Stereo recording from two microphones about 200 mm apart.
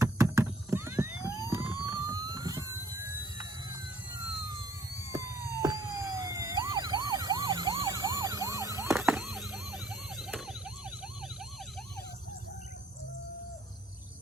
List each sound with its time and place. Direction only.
0.0 s neigh: 15° right (ahead or behind)
0.4 s police car: 15° right (ahead or behind)
9.0 s police car: 5° right (ahead or behind)